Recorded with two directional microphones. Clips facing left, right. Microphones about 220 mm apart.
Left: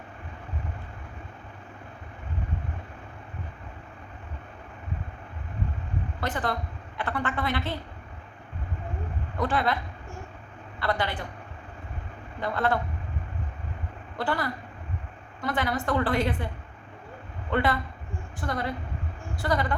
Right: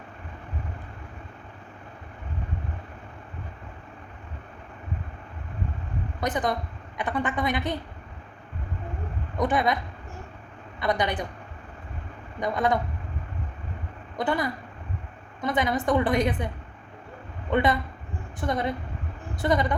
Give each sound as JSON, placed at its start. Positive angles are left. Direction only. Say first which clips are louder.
{"t": 6.1, "sound": "a woman's voice", "louder": "right 3 dB", "side_deg": -15}
{"t": 9.4, "sound": "a woman's voice", "louder": "right 3 dB", "side_deg": -20}
{"t": 10.8, "sound": "a woman's voice", "louder": "right 3 dB", "side_deg": -20}
{"t": 12.4, "sound": "a woman's voice", "louder": "right 2 dB", "side_deg": -15}
{"t": 14.2, "sound": "a woman's voice", "louder": "right 3 dB", "side_deg": -15}
{"t": 17.5, "sound": "a woman's voice", "louder": "right 3 dB", "side_deg": -20}